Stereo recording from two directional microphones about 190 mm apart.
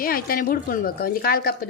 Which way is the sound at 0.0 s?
50° left (ahead or behind).